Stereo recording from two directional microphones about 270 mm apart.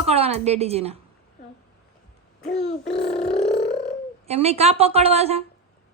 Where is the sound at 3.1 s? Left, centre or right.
Centre.